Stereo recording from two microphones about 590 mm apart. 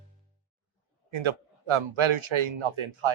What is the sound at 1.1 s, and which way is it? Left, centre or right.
Speech, right.